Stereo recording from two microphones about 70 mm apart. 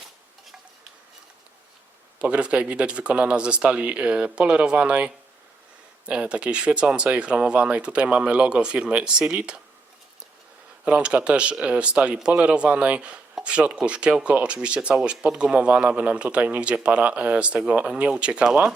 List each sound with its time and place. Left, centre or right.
2.1 s speech: centre
10.8 s speech: centre